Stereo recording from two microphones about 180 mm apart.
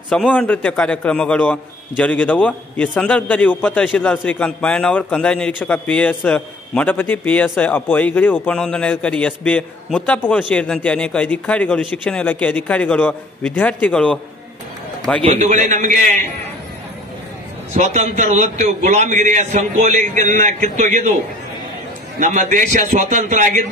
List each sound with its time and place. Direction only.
0.1 s a man's voice: 5° left (ahead or behind)
15.2 s a man's voice: 45° right (ahead or behind)
17.7 s a man's voice: 40° right (ahead or behind)
22.2 s a man's voice: 45° right (ahead or behind)